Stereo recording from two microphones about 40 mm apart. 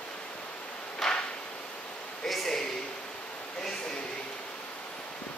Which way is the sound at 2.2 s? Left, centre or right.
Centre.